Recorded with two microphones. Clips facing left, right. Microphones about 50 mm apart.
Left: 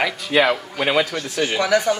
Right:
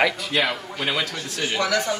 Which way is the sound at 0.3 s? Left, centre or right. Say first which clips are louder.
Left 6 dB; centre.